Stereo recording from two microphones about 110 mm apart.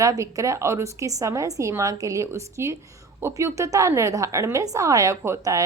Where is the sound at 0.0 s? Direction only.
30° right (ahead or behind).